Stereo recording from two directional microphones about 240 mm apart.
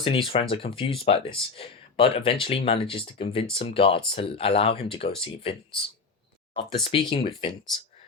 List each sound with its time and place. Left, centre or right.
0.0 s speech: left